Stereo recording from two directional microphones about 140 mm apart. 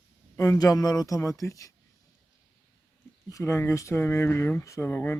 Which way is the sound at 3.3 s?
20° left (ahead or behind).